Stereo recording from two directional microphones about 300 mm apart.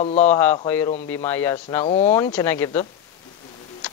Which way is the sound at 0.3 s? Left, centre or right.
Centre.